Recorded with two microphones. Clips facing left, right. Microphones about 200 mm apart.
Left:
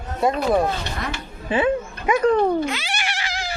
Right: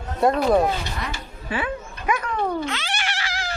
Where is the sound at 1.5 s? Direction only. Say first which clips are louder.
Left 8 dB; 25° left (ahead or behind).